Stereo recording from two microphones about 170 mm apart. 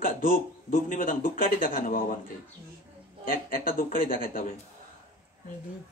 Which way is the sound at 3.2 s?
55° left (ahead or behind).